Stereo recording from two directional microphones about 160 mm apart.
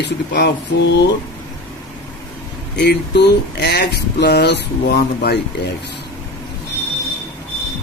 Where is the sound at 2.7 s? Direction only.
90° left.